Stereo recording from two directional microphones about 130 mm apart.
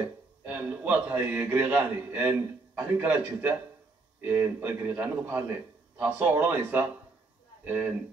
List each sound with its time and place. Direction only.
0.5 s a man's voice: 15° right (ahead or behind)